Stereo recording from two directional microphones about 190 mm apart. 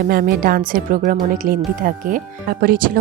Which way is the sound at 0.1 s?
50° right (ahead or behind).